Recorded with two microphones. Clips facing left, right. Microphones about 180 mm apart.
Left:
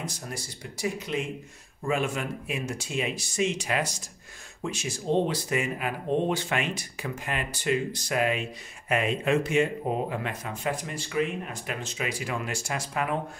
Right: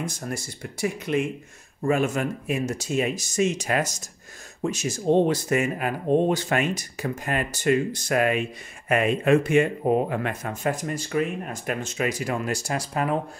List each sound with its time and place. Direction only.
0.0 s speech: 50° right (ahead or behind)